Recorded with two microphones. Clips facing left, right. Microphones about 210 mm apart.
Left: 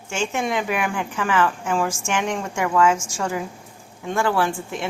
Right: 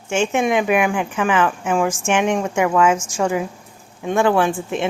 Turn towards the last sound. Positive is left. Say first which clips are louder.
# right 5 dB
turn(degrees=-20)  # may be behind; listen again after turning